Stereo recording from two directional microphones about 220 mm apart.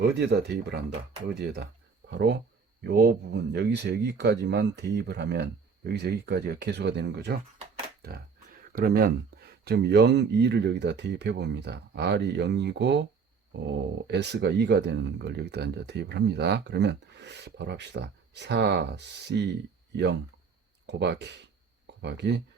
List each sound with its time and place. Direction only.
0.0 s speech: 50° right (ahead or behind)
8.7 s speech: 40° right (ahead or behind)
20.8 s speech: 50° right (ahead or behind)